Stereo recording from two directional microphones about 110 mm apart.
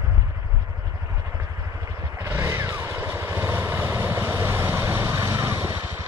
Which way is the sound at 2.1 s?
25° right (ahead or behind).